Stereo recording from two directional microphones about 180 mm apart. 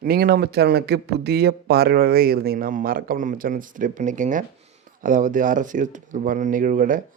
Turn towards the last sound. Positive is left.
turn(degrees=-45)  # may be behind; listen again after turning